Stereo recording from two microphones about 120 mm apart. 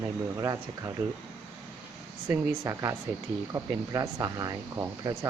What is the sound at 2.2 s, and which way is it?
Speech, 25° right (ahead or behind).